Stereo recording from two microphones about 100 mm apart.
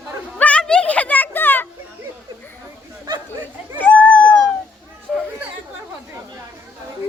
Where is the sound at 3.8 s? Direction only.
15° left (ahead or behind).